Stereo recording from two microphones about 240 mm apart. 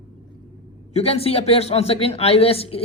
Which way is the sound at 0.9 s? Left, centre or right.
Left.